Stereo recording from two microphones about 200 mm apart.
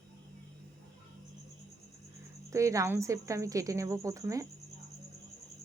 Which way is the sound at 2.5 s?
15° right (ahead or behind).